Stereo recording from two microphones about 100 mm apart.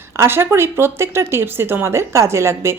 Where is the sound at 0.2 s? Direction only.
25° right (ahead or behind).